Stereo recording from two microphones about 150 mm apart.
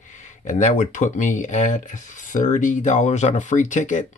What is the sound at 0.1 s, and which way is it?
Speech, 55° left (ahead or behind).